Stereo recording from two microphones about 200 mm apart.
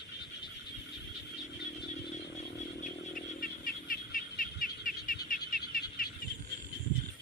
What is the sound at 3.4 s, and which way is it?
Bird, 45° left (ahead or behind).